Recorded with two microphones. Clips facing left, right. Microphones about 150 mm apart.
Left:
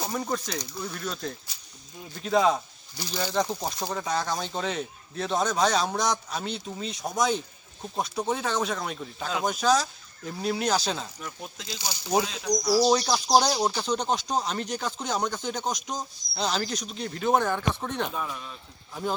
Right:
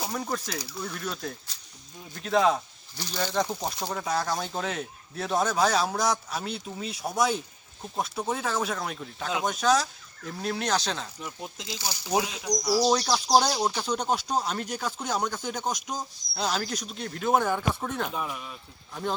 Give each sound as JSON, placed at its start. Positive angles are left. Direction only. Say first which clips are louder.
{"t": 0.1, "sound": "speech", "louder": "left 2 dB", "side_deg": 0}
{"t": 3.0, "sound": "speech", "louder": "even", "side_deg": 10}
{"t": 3.3, "sound": "speech", "louder": "left 1 dB", "side_deg": 0}
{"t": 11.2, "sound": "speech", "louder": "right 1 dB", "side_deg": -20}
{"t": 12.6, "sound": "speech", "louder": "left 2 dB", "side_deg": 0}
{"t": 13.7, "sound": "speech", "louder": "left 1 dB", "side_deg": -5}